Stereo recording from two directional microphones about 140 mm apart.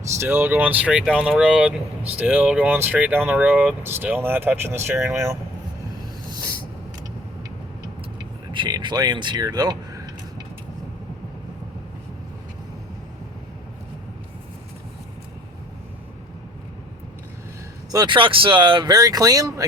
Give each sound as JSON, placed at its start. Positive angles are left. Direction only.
{"t": 0.2, "sound": "speech", "side_deg": -15}
{"t": 8.5, "sound": "speech", "side_deg": -35}
{"t": 17.9, "sound": "speech", "side_deg": -35}